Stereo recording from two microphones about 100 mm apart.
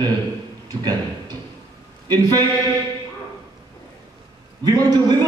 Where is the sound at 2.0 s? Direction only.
40° right (ahead or behind).